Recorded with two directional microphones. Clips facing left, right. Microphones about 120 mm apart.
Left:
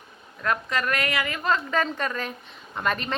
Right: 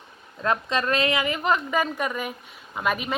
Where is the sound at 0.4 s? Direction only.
20° right (ahead or behind).